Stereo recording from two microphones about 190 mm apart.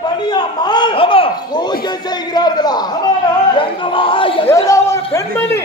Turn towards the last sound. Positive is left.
turn(degrees=15)  # may be behind; listen again after turning